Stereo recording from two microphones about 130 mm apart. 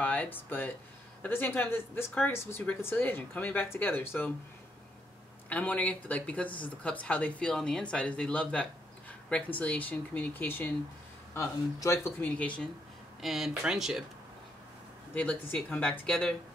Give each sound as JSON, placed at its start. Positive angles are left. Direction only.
{"t": 0.0, "sound": "speech", "side_deg": 10}
{"t": 5.5, "sound": "speech", "side_deg": 10}
{"t": 12.4, "sound": "speech", "side_deg": 10}
{"t": 13.2, "sound": "speech", "side_deg": 0}
{"t": 15.1, "sound": "speech", "side_deg": 10}